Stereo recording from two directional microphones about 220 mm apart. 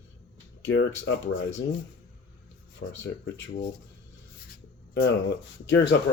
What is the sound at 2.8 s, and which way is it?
Speech, 60° left (ahead or behind).